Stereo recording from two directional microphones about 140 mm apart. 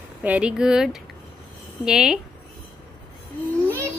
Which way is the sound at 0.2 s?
10° right (ahead or behind).